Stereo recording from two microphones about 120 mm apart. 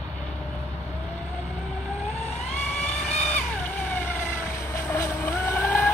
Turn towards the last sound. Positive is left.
turn(degrees=20)  # may be behind; listen again after turning